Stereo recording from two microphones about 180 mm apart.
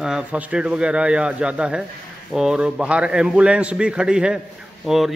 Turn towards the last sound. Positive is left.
turn(degrees=0)  # may be behind; listen again after turning